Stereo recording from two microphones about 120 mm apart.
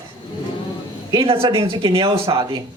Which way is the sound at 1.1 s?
50° right (ahead or behind).